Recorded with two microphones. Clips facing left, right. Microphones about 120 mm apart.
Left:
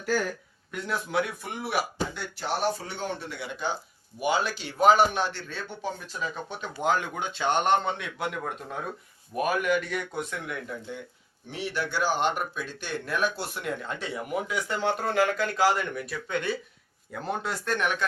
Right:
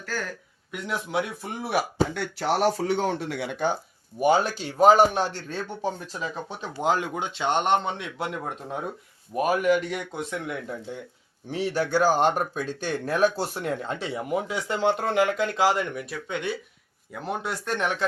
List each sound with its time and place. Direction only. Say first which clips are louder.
0.0 s speech: left 5 dB; 10° left (ahead or behind)
0.7 s speech: right 1 dB; 20° right (ahead or behind)
2.1 s speech: right 6 dB; 80° right
4.2 s speech: right 5 dB; 45° right (ahead or behind)
6.1 s speech: right 1 dB; 30° right (ahead or behind); by 17.7 s 10° right (ahead or behind)